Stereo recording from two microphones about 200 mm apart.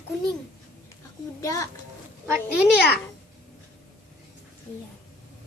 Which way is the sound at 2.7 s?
55° left (ahead or behind).